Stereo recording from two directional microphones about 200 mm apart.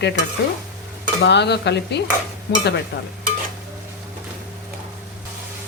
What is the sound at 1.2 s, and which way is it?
Stir, 60° left (ahead or behind).